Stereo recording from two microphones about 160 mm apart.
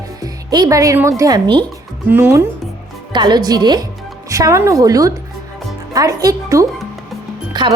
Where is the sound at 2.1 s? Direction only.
15° right (ahead or behind).